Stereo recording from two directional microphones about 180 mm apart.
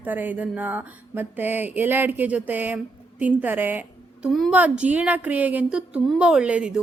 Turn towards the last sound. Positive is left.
turn(degrees=-5)  # may be behind; listen again after turning